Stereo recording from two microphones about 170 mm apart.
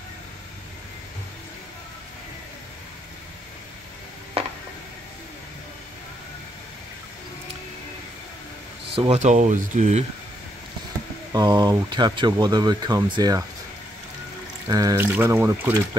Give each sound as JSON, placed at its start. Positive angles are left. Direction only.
{"t": 8.9, "sound": "speech", "side_deg": -35}
{"t": 11.3, "sound": "speech", "side_deg": -25}
{"t": 14.7, "sound": "speech", "side_deg": -20}